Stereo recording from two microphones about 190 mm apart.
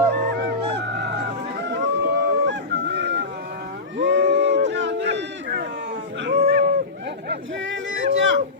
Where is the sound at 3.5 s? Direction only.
55° right (ahead or behind).